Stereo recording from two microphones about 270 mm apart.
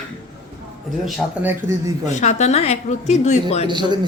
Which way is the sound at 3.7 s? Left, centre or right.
Centre.